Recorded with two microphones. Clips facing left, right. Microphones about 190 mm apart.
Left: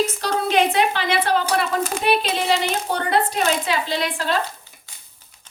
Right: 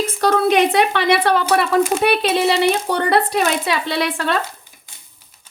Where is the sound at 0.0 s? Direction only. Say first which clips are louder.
Right 4 dB; 55° right (ahead or behind).